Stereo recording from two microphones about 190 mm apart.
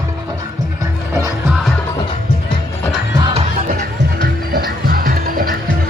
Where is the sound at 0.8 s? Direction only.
15° right (ahead or behind).